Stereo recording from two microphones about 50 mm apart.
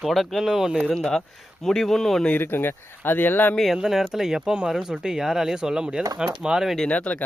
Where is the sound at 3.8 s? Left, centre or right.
Centre.